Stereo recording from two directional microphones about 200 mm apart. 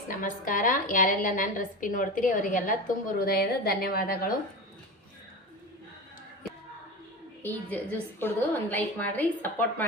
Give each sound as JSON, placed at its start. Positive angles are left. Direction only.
{"t": 0.2, "sound": "a woman's voice", "side_deg": 40}
{"t": 7.4, "sound": "a woman's voice", "side_deg": 10}